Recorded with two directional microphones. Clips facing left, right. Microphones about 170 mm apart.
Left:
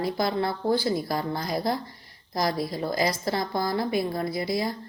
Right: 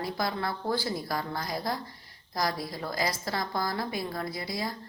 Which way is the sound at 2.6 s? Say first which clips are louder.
Left 6 dB; 25° left (ahead or behind).